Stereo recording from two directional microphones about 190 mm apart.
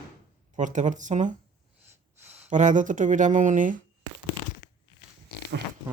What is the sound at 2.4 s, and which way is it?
Speech, 40° right (ahead or behind).